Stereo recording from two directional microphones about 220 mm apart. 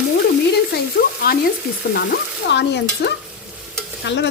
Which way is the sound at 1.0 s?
45° left (ahead or behind).